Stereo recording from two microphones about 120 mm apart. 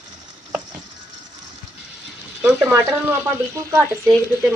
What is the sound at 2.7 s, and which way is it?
Speech, 20° right (ahead or behind).